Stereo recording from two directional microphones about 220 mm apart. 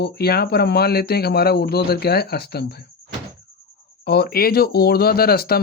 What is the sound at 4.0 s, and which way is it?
Speech, 45° left (ahead or behind).